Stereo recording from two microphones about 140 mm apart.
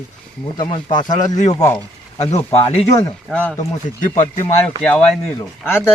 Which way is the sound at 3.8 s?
60° left (ahead or behind).